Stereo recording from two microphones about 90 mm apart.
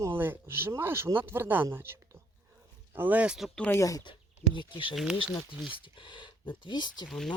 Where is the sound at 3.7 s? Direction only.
40° left (ahead or behind).